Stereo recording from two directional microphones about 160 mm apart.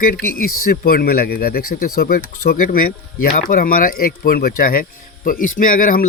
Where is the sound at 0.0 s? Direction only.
65° left (ahead or behind).